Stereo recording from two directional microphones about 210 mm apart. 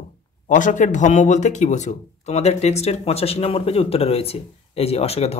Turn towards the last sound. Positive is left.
turn(degrees=30)  # may be behind; listen again after turning